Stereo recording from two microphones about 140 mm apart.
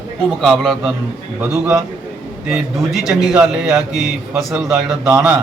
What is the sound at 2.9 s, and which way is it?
A man's voice, centre (ahead or behind).